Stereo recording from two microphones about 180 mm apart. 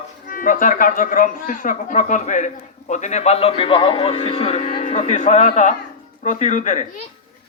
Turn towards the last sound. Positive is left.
turn(degrees=40)  # may be behind; listen again after turning